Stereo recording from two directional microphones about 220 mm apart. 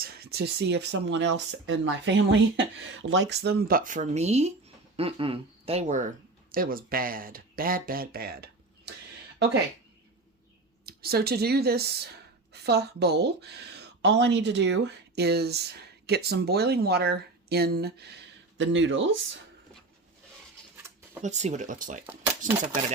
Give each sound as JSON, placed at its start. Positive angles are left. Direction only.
{"t": 0.0, "sound": "speech", "side_deg": -45}
{"t": 6.5, "sound": "speech", "side_deg": -40}
{"t": 10.8, "sound": "speech", "side_deg": -45}
{"t": 21.2, "sound": "speech", "side_deg": -30}